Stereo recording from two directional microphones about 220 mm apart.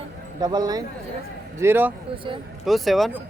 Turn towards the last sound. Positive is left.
turn(degrees=0)  # may be behind; listen again after turning